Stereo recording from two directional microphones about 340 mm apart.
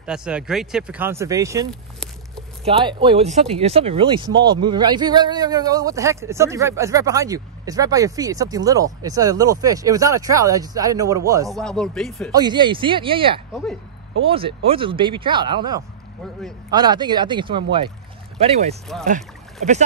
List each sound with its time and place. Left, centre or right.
0.0 s speech: centre
1.7 s a sound: centre
2.6 s speech: centre
12.3 s speech: centre